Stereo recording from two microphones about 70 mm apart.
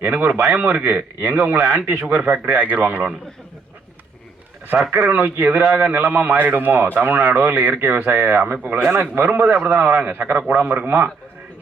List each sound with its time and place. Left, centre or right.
0.0 s speech: right
4.9 s a man's voice: right